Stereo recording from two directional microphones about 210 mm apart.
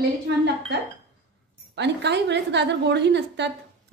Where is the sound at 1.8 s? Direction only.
55° right (ahead or behind).